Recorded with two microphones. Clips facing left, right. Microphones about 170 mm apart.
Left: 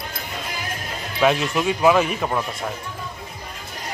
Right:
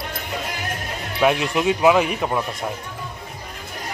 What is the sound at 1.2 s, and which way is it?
Speech, 15° right (ahead or behind).